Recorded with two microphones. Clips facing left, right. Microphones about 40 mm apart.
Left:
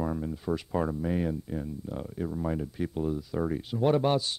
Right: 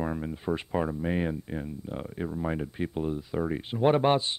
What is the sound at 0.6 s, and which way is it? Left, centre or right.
Speech, right.